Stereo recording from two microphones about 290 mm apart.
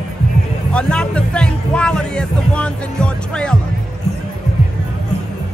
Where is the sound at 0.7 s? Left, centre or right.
Centre.